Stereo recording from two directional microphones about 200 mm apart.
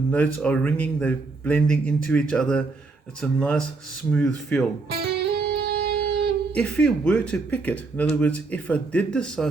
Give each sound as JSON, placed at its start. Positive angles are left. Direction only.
{"t": 0.1, "sound": "a man's voice", "side_deg": 5}
{"t": 5.0, "sound": "music", "side_deg": -55}
{"t": 6.5, "sound": "a man's voice", "side_deg": 5}